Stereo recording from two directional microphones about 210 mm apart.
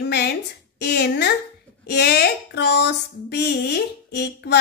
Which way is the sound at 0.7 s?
50° left (ahead or behind).